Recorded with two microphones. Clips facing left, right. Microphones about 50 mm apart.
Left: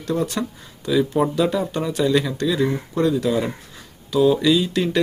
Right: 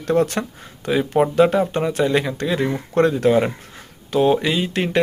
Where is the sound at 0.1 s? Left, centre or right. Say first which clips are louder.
Right 4 dB; right.